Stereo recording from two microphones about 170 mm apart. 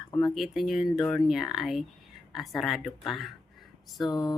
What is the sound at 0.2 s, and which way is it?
Speech, centre (ahead or behind).